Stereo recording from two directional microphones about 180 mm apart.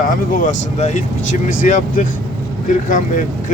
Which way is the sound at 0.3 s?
45° left (ahead or behind).